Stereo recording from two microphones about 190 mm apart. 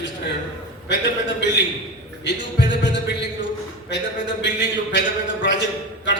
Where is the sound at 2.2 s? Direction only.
65° left (ahead or behind).